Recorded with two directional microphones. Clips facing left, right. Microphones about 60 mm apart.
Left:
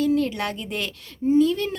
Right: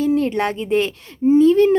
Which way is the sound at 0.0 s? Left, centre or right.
Right.